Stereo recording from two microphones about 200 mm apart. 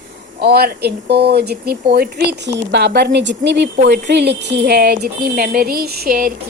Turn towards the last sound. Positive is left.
turn(degrees=-45)  # may be behind; listen again after turning